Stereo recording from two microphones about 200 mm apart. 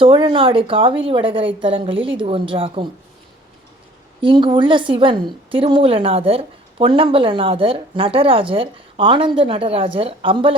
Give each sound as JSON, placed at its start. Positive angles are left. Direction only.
{"t": 0.0, "sound": "a woman's voice", "side_deg": -25}
{"t": 4.2, "sound": "a woman's voice", "side_deg": -25}